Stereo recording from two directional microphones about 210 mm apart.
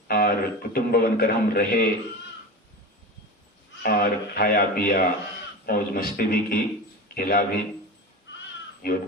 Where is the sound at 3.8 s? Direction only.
45° left (ahead or behind).